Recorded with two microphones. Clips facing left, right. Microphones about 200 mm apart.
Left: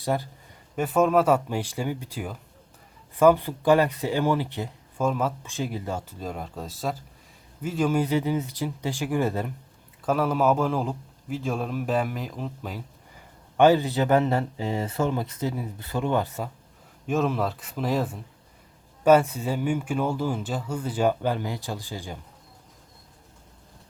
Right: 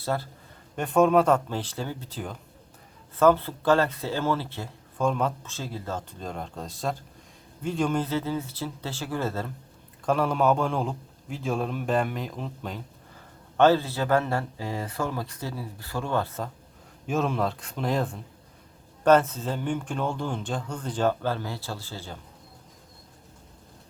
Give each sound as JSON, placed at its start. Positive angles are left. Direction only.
{"t": 0.0, "sound": "speech", "side_deg": 15}
{"t": 0.8, "sound": "a man's voice", "side_deg": 5}
{"t": 5.0, "sound": "speech", "side_deg": 5}
{"t": 5.5, "sound": "a man's voice", "side_deg": 15}
{"t": 10.1, "sound": "a man's voice", "side_deg": 5}
{"t": 17.1, "sound": "a man's voice", "side_deg": 0}